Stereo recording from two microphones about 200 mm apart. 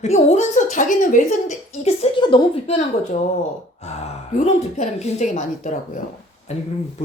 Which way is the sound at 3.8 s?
35° left (ahead or behind).